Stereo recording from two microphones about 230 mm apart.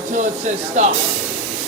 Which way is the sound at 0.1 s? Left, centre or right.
Right.